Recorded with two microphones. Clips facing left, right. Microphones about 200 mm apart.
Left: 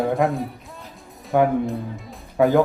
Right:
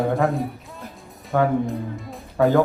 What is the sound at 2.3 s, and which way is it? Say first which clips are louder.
Speech: left 1 dB; 15° left (ahead or behind).